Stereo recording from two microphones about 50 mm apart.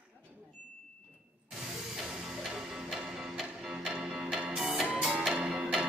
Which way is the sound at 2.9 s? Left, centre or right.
Centre.